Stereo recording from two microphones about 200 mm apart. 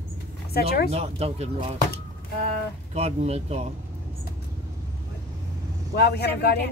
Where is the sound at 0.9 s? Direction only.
30° right (ahead or behind).